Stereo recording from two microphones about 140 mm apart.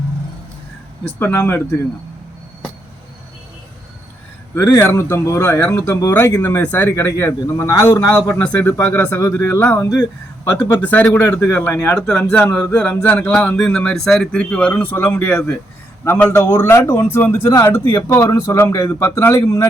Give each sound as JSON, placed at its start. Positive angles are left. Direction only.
{"t": 1.2, "sound": "speech", "side_deg": 15}
{"t": 4.5, "sound": "speech", "side_deg": 25}
{"t": 10.7, "sound": "speech", "side_deg": 10}